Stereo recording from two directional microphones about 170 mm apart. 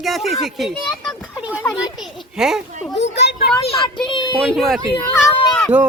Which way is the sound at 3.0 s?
90° left.